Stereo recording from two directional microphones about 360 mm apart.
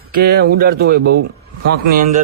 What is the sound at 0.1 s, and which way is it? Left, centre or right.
A man's voice, right.